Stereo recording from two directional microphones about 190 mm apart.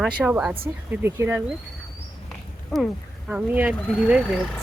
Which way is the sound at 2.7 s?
Centre (ahead or behind).